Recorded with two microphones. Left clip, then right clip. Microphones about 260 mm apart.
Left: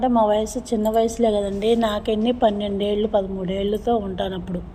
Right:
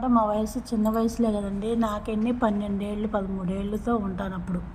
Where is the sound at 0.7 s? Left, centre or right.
Right.